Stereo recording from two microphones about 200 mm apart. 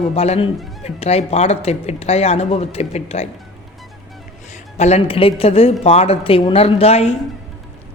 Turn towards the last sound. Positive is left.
turn(degrees=30)  # may be behind; listen again after turning